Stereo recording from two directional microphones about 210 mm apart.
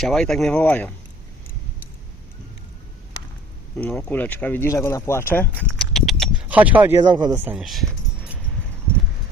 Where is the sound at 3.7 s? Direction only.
10° left (ahead or behind).